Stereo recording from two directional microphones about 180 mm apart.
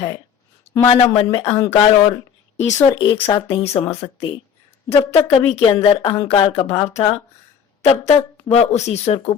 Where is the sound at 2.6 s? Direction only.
15° left (ahead or behind).